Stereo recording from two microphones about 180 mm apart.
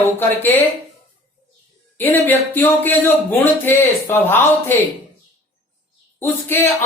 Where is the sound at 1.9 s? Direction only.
10° left (ahead or behind).